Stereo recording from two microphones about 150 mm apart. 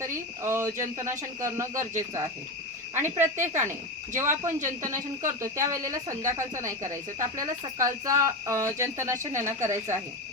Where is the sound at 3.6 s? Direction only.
55° right (ahead or behind).